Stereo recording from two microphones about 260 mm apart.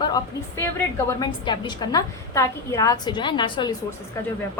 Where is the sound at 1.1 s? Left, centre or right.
Centre.